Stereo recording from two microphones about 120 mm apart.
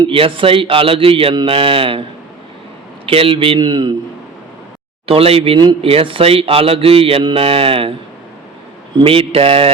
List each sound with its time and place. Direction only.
0.1 s speech: 50° right (ahead or behind)
3.1 s speech: 50° right (ahead or behind)
5.0 s speech: 55° right (ahead or behind)
5.5 s speech: 40° right (ahead or behind)
5.9 s speech: 50° right (ahead or behind)
9.0 s speech: 50° right (ahead or behind)